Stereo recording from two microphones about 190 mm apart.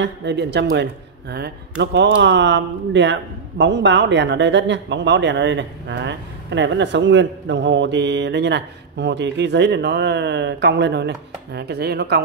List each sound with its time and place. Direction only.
0.0 s speech: 65° right (ahead or behind)